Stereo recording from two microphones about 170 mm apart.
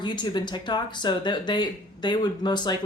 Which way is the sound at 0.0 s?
25° left (ahead or behind).